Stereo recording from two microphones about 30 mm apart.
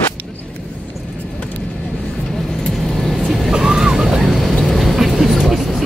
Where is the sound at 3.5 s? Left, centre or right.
Centre.